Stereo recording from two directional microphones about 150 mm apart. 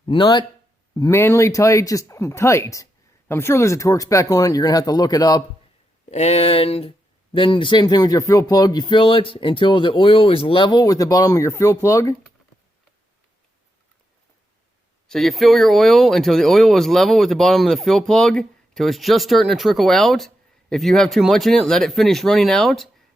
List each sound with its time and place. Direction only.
0.0 s speech: 35° left (ahead or behind)
0.9 s speech: 20° left (ahead or behind)
6.1 s speech: 45° left (ahead or behind); by 12.1 s 20° left (ahead or behind)
15.0 s speech: 5° left (ahead or behind)